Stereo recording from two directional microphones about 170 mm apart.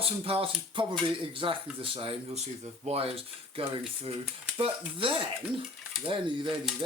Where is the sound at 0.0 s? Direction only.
35° right (ahead or behind).